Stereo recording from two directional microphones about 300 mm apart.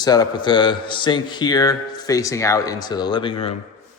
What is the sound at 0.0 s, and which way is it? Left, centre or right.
A man's voice, centre.